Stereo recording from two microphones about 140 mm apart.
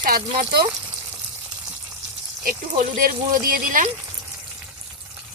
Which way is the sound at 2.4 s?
75° right (ahead or behind).